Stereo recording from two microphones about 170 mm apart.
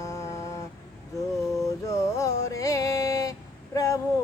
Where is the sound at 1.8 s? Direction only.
20° left (ahead or behind).